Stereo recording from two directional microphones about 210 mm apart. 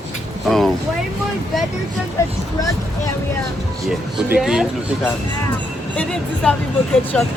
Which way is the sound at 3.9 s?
Centre (ahead or behind).